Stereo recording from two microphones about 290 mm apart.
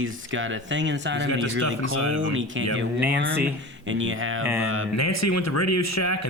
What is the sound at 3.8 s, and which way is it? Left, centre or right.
Speech, right.